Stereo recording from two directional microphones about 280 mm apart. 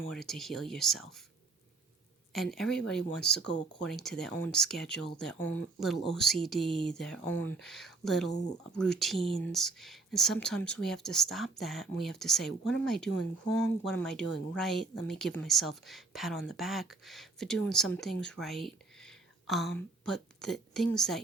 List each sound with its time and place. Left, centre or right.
0.1 s speech: centre
2.3 s speech: centre
9.1 s speech: centre
9.5 s speech: centre